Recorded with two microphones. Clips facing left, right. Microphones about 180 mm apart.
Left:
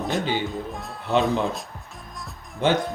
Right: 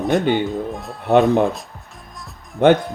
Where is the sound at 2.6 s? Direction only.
60° right (ahead or behind).